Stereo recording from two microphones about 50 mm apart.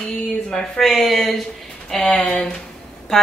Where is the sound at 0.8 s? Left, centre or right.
Centre.